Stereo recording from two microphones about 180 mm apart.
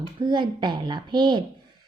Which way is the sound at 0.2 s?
25° right (ahead or behind).